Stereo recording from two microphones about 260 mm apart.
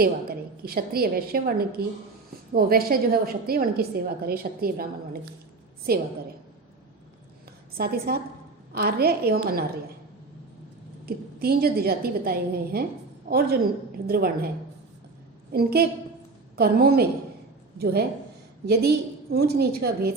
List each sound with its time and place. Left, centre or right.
0.0 s a woman's voice: right
7.8 s a woman's voice: right
11.0 s a woman's voice: right
14.1 s a woman's voice: right
15.5 s a woman's voice: right